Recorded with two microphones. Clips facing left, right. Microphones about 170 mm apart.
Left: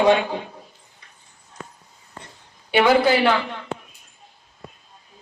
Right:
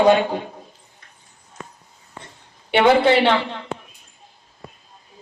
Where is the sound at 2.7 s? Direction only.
25° right (ahead or behind).